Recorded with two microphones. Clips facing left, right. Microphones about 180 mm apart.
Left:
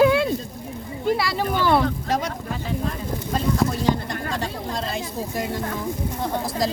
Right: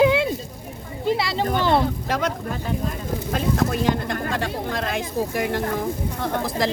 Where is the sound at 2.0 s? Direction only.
60° right (ahead or behind).